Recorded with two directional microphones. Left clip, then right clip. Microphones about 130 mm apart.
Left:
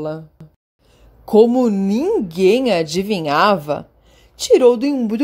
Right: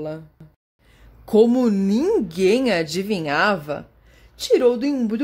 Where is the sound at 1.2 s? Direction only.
10° left (ahead or behind).